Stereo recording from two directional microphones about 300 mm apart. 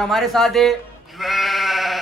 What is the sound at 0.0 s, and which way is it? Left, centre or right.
Speech, centre.